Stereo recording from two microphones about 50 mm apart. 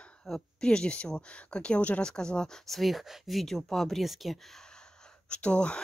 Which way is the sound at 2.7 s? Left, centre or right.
Centre.